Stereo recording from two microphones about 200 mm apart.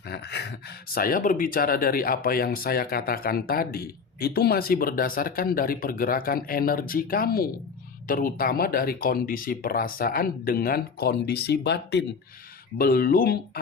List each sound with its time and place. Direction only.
0.1 s a sound: 55° left (ahead or behind)
0.9 s speech: 45° left (ahead or behind)
12.7 s speech: 50° left (ahead or behind)